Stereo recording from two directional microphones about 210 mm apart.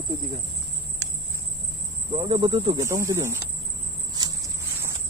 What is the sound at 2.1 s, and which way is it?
Speech, 20° right (ahead or behind).